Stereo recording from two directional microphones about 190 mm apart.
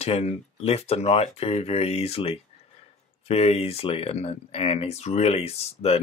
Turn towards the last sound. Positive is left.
turn(degrees=30)  # may be behind; listen again after turning